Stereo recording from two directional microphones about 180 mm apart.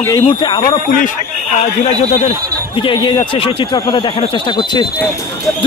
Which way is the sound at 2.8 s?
25° left (ahead or behind).